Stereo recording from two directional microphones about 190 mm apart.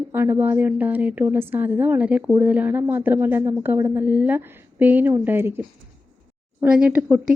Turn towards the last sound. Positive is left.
turn(degrees=-10)  # may be behind; listen again after turning